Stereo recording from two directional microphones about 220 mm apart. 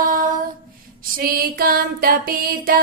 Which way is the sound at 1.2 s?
40° right (ahead or behind).